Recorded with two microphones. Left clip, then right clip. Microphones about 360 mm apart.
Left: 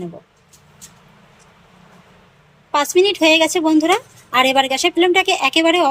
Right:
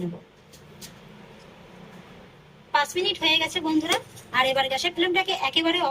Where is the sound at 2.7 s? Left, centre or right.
Centre.